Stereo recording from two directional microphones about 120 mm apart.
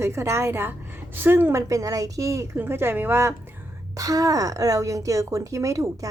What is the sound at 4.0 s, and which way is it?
A woman's voice, 30° right (ahead or behind).